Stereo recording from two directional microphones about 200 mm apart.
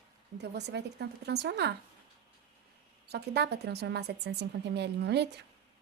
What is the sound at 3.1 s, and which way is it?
A woman's voice, 55° right (ahead or behind).